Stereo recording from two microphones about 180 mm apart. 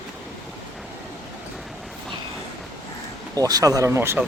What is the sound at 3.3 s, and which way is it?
Speech, 20° right (ahead or behind).